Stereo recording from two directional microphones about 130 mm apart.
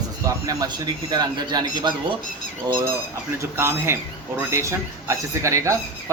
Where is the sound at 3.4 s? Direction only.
20° right (ahead or behind).